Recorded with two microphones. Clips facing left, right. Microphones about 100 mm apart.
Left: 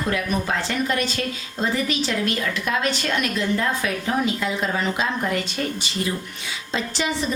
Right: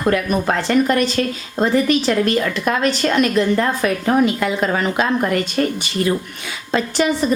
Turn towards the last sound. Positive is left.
turn(degrees=-50)  # may be behind; listen again after turning